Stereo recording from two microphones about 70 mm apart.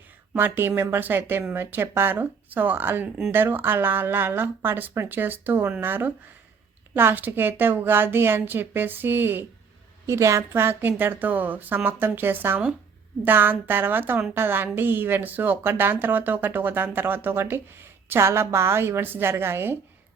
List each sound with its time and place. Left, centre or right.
0.3 s a woman's voice: right
10.1 s a woman's voice: right
10.5 s a woman's voice: right